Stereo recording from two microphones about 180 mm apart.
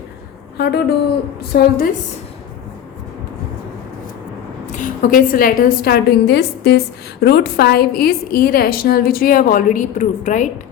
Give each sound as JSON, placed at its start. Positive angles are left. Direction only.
{"t": 0.5, "sound": "a woman's voice", "side_deg": 65}
{"t": 4.6, "sound": "a woman's voice", "side_deg": 45}